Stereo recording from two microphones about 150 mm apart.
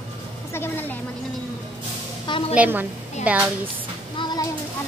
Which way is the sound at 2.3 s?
40° left (ahead or behind).